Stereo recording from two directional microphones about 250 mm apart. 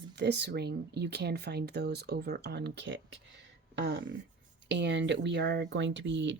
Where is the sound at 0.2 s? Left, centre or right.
Right.